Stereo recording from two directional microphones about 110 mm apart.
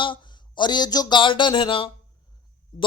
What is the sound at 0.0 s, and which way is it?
A man's voice, 45° left (ahead or behind).